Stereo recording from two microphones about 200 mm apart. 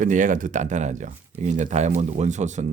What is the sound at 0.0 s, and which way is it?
Speech, 40° right (ahead or behind).